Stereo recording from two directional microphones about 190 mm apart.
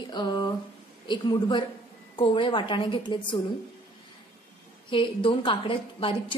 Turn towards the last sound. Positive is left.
turn(degrees=25)  # may be behind; listen again after turning